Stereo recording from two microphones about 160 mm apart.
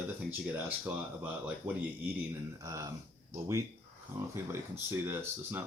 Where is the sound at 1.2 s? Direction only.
10° right (ahead or behind).